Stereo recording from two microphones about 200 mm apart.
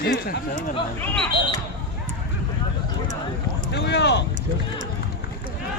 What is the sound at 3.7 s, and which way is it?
Speech, 60° left (ahead or behind).